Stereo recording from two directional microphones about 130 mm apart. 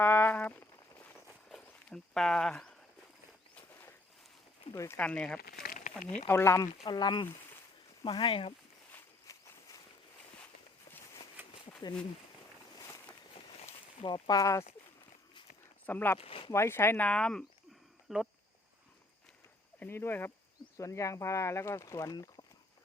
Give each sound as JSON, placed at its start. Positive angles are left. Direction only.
{"t": 0.0, "sound": "a sound", "side_deg": 15}
{"t": 1.5, "sound": "livestock", "side_deg": 5}
{"t": 4.7, "sound": "speech", "side_deg": 25}
{"t": 4.9, "sound": "speech", "side_deg": 10}
{"t": 6.2, "sound": "speech", "side_deg": 20}
{"t": 6.8, "sound": "speech", "side_deg": 35}
{"t": 8.9, "sound": "walk", "side_deg": 15}
{"t": 9.3, "sound": "walk", "side_deg": 30}
{"t": 14.0, "sound": "speech", "side_deg": 35}
{"t": 15.9, "sound": "speech", "side_deg": 15}
{"t": 16.1, "sound": "speech", "side_deg": 45}
{"t": 16.5, "sound": "speech", "side_deg": 20}
{"t": 19.8, "sound": "speech", "side_deg": 15}